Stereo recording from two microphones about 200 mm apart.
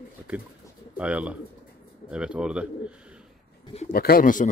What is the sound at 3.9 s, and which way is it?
Speech, 50° left (ahead or behind).